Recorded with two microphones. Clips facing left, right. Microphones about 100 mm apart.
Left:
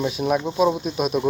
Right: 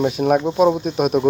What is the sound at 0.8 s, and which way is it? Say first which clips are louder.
Speech: right 5 dB; 50° right (ahead or behind).